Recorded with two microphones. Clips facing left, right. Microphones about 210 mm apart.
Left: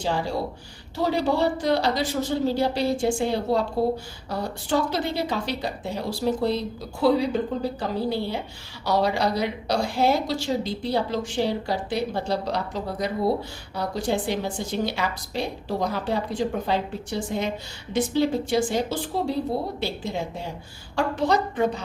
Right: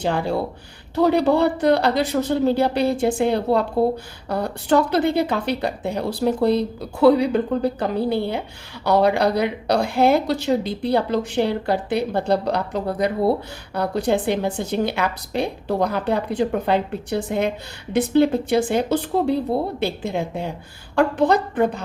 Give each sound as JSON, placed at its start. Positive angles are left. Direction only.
{"t": 0.0, "sound": "a woman's voice", "side_deg": -60}